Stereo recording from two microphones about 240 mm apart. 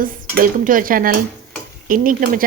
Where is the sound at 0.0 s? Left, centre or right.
Right.